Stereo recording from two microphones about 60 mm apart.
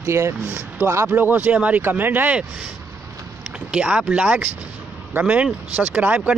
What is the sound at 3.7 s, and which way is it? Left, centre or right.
Speech, centre.